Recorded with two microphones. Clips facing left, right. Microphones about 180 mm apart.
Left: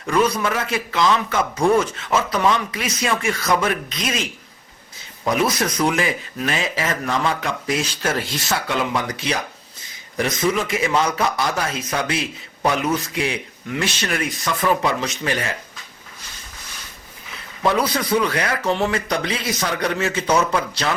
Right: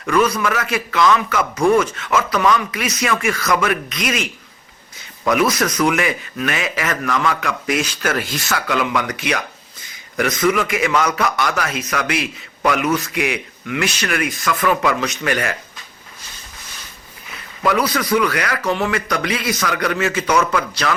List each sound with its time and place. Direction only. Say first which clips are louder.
0.0 s a man's voice: right 2 dB; 30° left (ahead or behind)
17.6 s a man's voice: right 1 dB; 30° left (ahead or behind)